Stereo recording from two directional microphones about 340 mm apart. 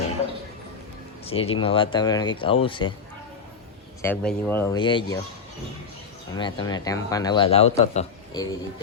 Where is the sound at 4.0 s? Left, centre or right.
Centre.